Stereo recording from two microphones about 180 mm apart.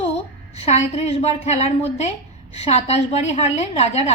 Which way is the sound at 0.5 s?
35° left (ahead or behind).